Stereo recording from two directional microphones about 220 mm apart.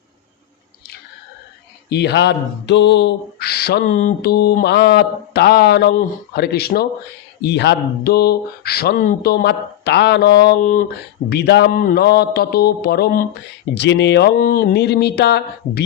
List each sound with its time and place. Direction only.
1.9 s mantra: 50° left (ahead or behind)
11.3 s mantra: 50° left (ahead or behind)